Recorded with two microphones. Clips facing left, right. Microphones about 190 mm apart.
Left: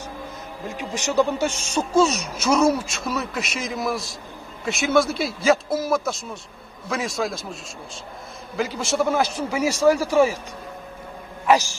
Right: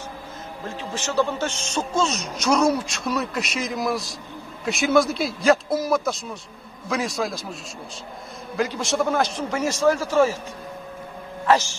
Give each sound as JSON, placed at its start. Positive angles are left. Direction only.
{"t": 0.7, "sound": "a man's voice", "side_deg": 15}
{"t": 8.5, "sound": "a man's voice", "side_deg": 5}